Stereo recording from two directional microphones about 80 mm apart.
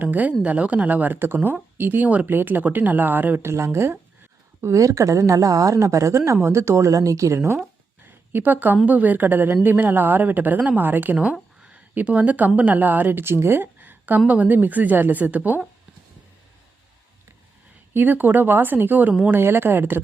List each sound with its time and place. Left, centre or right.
0.0 s a woman's voice: right
8.3 s speech: right
11.6 s a sound: centre
12.5 s a woman's voice: right
17.9 s speech: right